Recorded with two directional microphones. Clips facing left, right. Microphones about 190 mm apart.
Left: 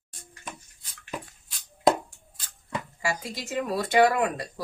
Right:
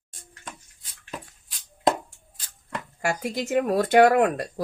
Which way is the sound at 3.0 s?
50° right (ahead or behind).